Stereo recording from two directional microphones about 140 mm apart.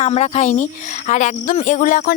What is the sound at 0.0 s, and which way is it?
A woman's voice, 50° left (ahead or behind).